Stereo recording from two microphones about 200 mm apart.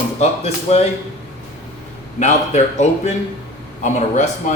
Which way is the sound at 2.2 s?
35° left (ahead or behind).